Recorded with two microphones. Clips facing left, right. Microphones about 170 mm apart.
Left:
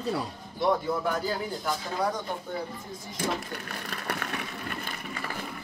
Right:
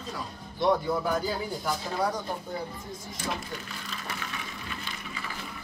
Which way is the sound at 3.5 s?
60° left (ahead or behind).